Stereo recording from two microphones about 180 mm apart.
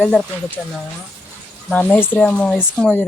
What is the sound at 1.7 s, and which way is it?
Speech, 10° left (ahead or behind).